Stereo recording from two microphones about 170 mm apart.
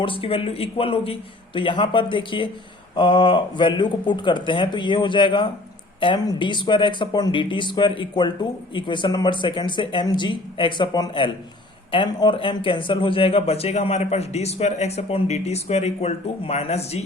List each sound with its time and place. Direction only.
0.0 s a man's voice: 30° left (ahead or behind)